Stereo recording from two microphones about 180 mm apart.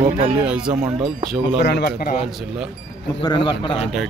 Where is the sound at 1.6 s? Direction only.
60° left (ahead or behind).